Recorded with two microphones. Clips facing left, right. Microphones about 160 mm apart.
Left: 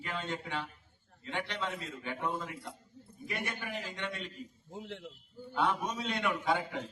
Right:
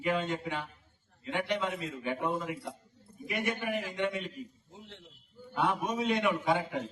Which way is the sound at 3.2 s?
20° right (ahead or behind).